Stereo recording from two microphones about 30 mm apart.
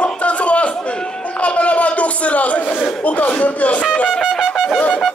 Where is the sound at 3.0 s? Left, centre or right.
Left.